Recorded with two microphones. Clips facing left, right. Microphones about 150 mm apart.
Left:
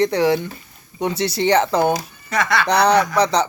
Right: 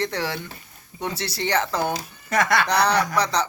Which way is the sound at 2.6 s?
20° left (ahead or behind).